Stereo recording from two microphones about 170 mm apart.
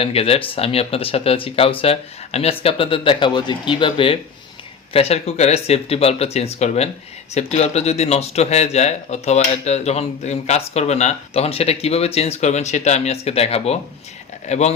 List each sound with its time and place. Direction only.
0.0 s a man's voice: 35° left (ahead or behind)